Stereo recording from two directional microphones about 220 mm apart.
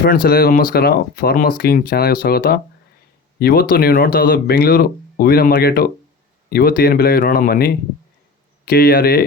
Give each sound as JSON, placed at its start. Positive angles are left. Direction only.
{"t": 0.0, "sound": "speech", "side_deg": 40}